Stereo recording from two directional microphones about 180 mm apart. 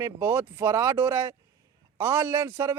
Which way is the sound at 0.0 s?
10° right (ahead or behind).